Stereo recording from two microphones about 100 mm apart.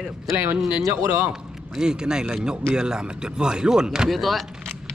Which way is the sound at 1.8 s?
10° right (ahead or behind).